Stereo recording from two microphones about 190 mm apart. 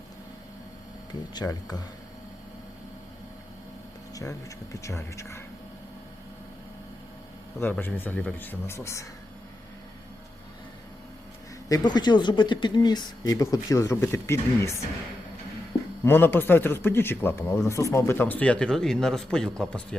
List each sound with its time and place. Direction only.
1.3 s speech: 20° left (ahead or behind)
4.1 s a man's voice: 15° left (ahead or behind)
7.6 s a man's voice: 10° left (ahead or behind)
11.7 s speech: 20° left (ahead or behind)
16.0 s a man's voice: 10° left (ahead or behind)